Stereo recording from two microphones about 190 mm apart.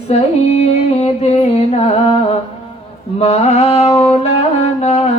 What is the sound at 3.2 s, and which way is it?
Mantra, 35° left (ahead or behind).